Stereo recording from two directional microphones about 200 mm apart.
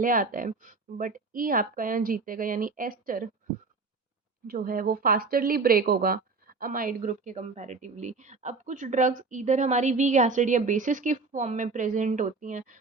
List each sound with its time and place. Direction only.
0.0 s a woman's voice: 45° right (ahead or behind)
4.4 s speech: 45° right (ahead or behind)